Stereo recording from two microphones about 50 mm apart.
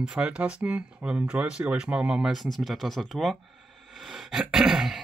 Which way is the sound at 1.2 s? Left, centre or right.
Right.